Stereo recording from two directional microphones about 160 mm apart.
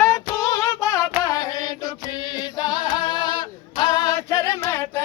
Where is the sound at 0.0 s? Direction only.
20° left (ahead or behind).